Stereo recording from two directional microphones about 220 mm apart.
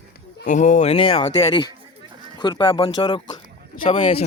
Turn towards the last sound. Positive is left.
turn(degrees=25)  # may be behind; listen again after turning